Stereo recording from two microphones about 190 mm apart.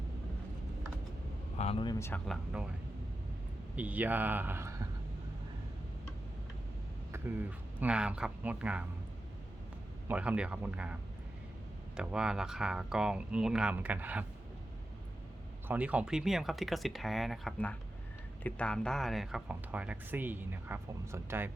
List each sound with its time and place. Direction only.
1.5 s speech: 30° left (ahead or behind); by 2.2 s 15° left (ahead or behind)
2.2 s speech: centre (ahead or behind)
3.8 s speech: 10° right (ahead or behind)
7.1 s speech: 10° right (ahead or behind)
10.1 s speech: 5° right (ahead or behind)
11.9 s speech: 5° right (ahead or behind)
15.6 s speech: 10° right (ahead or behind)